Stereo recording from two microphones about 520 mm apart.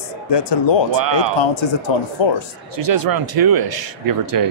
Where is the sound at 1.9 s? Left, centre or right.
Left.